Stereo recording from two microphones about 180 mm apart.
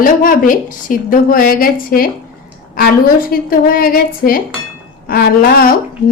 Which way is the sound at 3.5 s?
55° left (ahead or behind).